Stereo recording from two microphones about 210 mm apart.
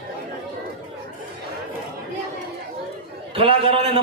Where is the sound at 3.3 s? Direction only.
25° right (ahead or behind).